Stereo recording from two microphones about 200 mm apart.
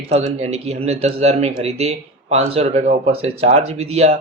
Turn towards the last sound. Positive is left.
turn(degrees=-30)  # may be behind; listen again after turning